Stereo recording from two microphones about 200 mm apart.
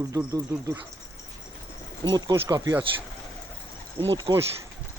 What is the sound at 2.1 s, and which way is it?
Speech, 20° right (ahead or behind).